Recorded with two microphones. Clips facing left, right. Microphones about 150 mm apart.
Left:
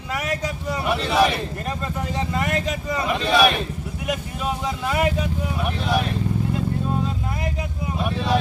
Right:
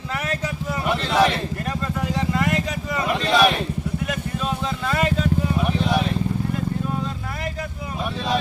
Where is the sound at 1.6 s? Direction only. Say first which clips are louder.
Right 1 dB; 20° left (ahead or behind).